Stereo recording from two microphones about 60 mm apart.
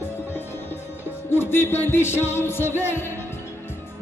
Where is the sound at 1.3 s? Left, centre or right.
Left.